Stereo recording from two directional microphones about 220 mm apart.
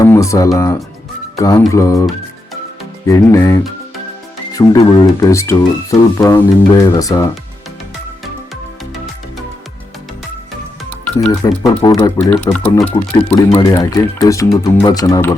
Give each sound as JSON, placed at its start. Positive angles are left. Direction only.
{"t": 0.0, "sound": "speech", "side_deg": 15}
{"t": 3.1, "sound": "speech", "side_deg": 15}
{"t": 11.4, "sound": "speech", "side_deg": 20}
{"t": 13.5, "sound": "speech", "side_deg": 20}